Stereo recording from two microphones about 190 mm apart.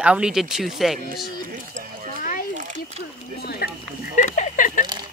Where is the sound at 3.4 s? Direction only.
55° left (ahead or behind).